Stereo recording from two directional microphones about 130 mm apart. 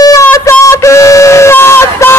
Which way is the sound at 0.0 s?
25° left (ahead or behind).